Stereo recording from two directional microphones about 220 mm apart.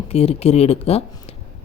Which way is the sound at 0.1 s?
25° left (ahead or behind).